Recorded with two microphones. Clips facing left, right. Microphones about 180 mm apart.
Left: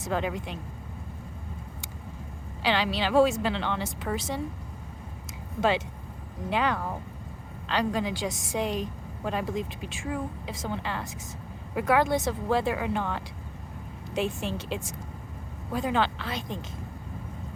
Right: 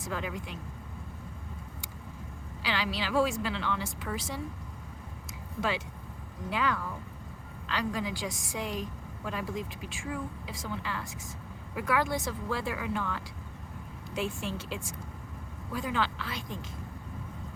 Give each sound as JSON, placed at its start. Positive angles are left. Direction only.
{"t": 0.0, "sound": "a woman's voice", "side_deg": 25}
{"t": 2.6, "sound": "a woman's voice", "side_deg": 25}
{"t": 5.5, "sound": "a woman's voice", "side_deg": 25}
{"t": 6.7, "sound": "speech", "side_deg": 45}
{"t": 7.9, "sound": "a woman's voice", "side_deg": 25}